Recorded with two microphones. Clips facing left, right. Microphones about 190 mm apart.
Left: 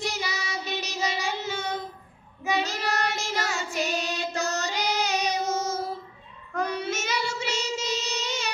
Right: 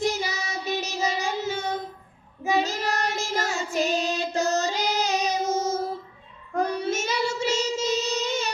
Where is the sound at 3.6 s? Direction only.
30° right (ahead or behind).